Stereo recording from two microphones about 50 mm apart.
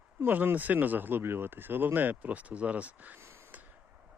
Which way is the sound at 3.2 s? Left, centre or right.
Right.